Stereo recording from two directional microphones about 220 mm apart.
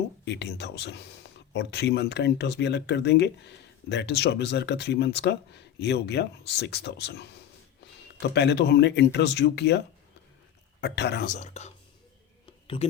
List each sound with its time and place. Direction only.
0.3 s speech: 50° left (ahead or behind)
8.4 s speech: 50° left (ahead or behind)
11.3 s speech: 30° left (ahead or behind)